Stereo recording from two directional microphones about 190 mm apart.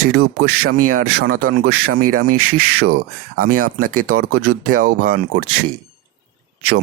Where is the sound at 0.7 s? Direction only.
50° right (ahead or behind).